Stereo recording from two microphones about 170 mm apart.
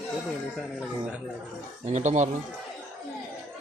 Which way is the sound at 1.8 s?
45° right (ahead or behind).